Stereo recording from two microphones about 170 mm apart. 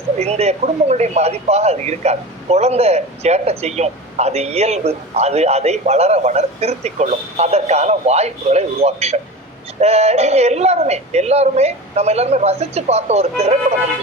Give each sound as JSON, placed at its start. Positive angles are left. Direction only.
{"t": 0.2, "sound": "speech", "side_deg": -40}